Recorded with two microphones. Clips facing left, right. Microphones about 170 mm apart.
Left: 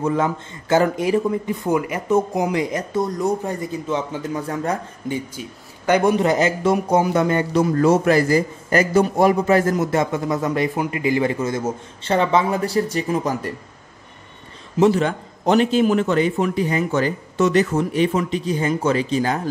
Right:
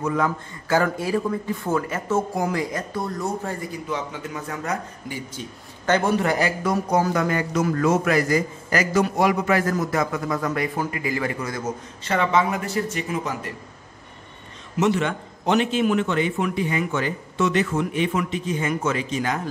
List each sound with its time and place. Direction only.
0.0 s a man's voice: 25° left (ahead or behind)
3.9 s a man's voice: 30° left (ahead or behind)
5.3 s a man's voice: 10° left (ahead or behind); by 13.5 s 40° left (ahead or behind)
14.8 s speech: 35° left (ahead or behind)